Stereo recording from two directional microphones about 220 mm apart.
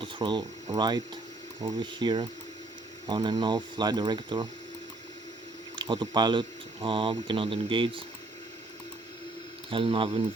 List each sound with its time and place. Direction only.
0.0 s speech: 20° right (ahead or behind)
5.7 s speech: 20° right (ahead or behind)
9.6 s speech: 25° right (ahead or behind)